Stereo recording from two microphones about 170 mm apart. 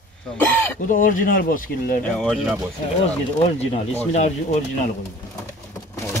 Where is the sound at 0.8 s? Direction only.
50° left (ahead or behind).